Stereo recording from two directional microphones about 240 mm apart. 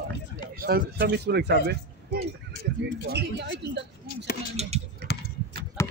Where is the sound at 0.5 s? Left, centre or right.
Right.